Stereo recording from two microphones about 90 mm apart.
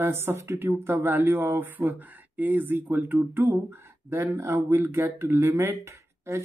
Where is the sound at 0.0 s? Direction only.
25° right (ahead or behind).